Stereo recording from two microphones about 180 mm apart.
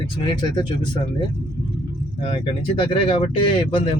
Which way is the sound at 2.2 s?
30° left (ahead or behind).